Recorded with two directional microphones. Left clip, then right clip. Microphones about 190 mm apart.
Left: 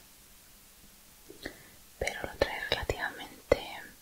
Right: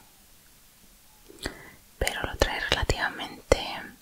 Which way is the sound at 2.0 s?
15° right (ahead or behind).